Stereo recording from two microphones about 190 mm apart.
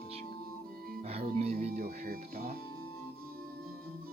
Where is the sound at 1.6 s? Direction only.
45° right (ahead or behind).